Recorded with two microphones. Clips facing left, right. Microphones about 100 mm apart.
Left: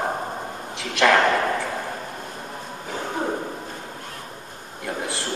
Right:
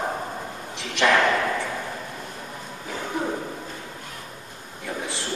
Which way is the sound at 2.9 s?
25° left (ahead or behind).